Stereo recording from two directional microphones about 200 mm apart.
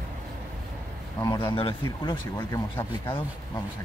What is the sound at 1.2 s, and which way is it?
Speech, 20° left (ahead or behind).